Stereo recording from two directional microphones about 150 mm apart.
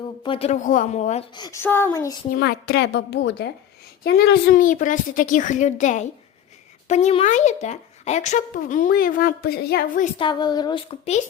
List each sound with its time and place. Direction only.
0.2 s speech: 40° left (ahead or behind)
1.4 s a woman's voice: 25° left (ahead or behind)
2.3 s a woman's voice: 90° left
4.0 s speech: 80° left
10.2 s a woman's voice: 30° left (ahead or behind)